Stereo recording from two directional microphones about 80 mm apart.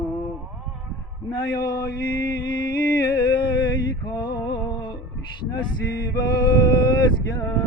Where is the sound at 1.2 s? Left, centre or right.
Left.